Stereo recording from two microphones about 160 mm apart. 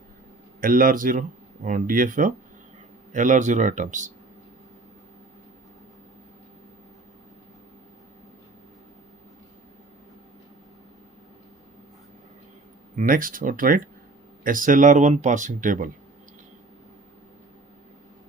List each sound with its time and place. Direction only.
0.6 s speech: 60° right (ahead or behind)
13.0 s speech: 60° right (ahead or behind)